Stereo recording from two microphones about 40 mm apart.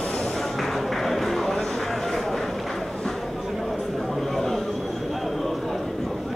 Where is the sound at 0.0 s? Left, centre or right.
Centre.